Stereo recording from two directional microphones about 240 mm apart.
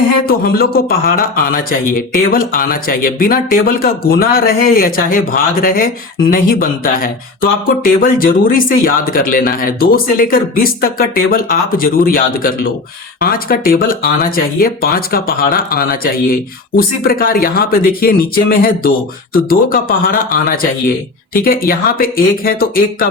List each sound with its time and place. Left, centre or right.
0.3 s speech: left